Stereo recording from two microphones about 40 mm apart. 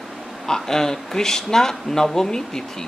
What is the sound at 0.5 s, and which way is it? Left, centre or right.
Speech, centre.